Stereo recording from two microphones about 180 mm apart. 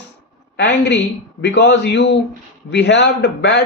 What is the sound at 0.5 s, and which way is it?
A man's voice, 70° left (ahead or behind).